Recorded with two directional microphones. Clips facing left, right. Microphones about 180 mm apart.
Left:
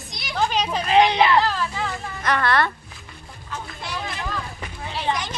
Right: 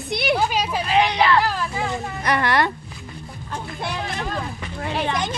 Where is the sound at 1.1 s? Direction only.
20° left (ahead or behind).